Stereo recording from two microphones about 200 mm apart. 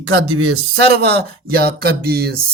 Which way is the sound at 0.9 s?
55° right (ahead or behind).